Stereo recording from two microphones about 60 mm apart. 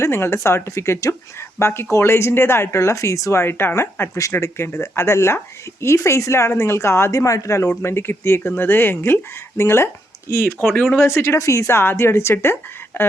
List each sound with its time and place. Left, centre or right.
0.0 s speech: left
3.4 s speech: left
7.8 s speech: left